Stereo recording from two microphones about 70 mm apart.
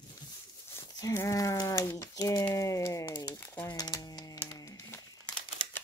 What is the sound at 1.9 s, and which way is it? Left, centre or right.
Speech, left.